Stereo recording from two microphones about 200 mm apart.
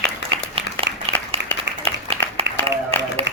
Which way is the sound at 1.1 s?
30° right (ahead or behind).